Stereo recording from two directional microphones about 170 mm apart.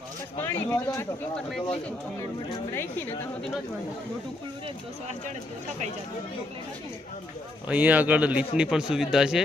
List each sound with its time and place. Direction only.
0.4 s speech: 15° left (ahead or behind)
1.4 s speech: 5° left (ahead or behind)
7.7 s speech: 10° right (ahead or behind)